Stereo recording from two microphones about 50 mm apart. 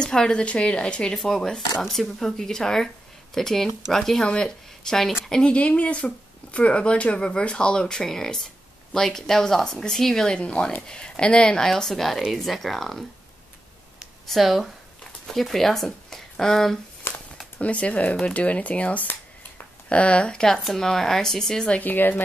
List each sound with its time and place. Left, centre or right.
0.0 s speech: centre
1.1 s speech: centre
5.4 s speech: left; by 13.0 s centre
14.2 s speech: centre
17.1 s a sound: left
17.6 s speech: left
21.7 s speech: left